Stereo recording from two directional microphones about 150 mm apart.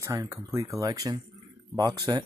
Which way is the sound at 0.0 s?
20° right (ahead or behind).